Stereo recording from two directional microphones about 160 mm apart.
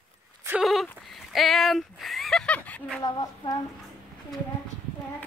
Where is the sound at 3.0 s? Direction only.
25° left (ahead or behind).